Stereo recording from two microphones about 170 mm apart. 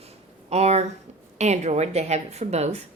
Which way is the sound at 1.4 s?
40° right (ahead or behind).